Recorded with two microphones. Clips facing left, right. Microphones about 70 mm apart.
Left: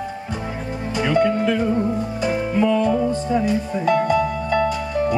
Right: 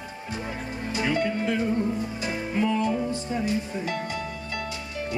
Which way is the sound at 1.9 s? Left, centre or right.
Left.